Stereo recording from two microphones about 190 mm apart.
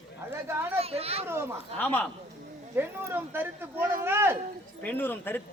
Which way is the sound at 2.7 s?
10° right (ahead or behind).